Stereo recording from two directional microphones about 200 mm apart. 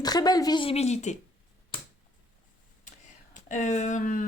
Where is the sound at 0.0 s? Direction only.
20° left (ahead or behind); by 1.2 s 35° left (ahead or behind).